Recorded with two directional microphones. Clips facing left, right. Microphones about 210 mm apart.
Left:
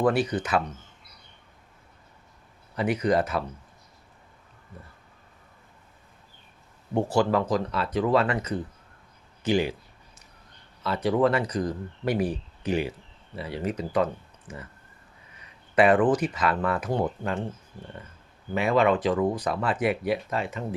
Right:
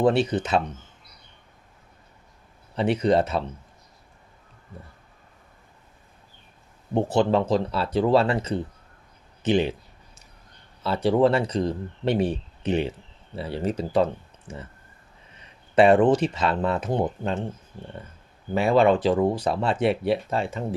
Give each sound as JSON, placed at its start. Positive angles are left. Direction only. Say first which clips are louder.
{"t": 0.0, "sound": "speech", "louder": "right 3 dB", "side_deg": -25}
{"t": 2.7, "sound": "speech", "louder": "right 3 dB", "side_deg": -30}
{"t": 6.9, "sound": "speech", "louder": "right 2 dB", "side_deg": -20}
{"t": 10.8, "sound": "speech", "louder": "right 3 dB", "side_deg": -30}
{"t": 15.7, "sound": "speech", "louder": "right 3 dB", "side_deg": -30}
{"t": 18.5, "sound": "speech", "louder": "right 3 dB", "side_deg": -30}